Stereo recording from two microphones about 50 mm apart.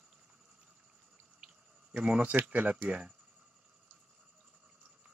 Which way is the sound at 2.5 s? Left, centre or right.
Right.